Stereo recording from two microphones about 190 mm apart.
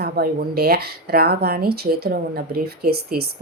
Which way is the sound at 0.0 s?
55° right (ahead or behind).